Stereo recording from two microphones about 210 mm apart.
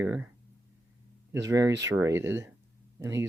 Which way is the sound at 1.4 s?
15° right (ahead or behind).